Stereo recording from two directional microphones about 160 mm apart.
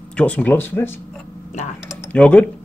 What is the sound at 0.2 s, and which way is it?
Speech, 10° left (ahead or behind).